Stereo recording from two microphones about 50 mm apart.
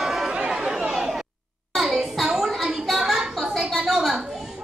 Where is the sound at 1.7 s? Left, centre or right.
Centre.